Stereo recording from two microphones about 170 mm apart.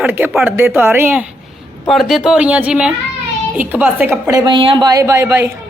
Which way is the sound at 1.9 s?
Centre (ahead or behind).